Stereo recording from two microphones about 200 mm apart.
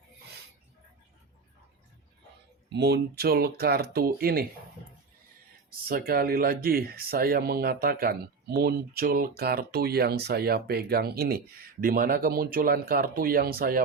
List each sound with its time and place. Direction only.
2.7 s speech: 55° right (ahead or behind)
5.9 s speech: 45° right (ahead or behind)